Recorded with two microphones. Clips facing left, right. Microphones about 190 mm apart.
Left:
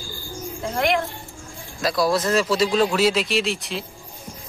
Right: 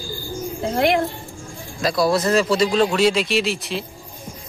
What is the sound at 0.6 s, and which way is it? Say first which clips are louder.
Music: right 3 dB; 30° right (ahead or behind).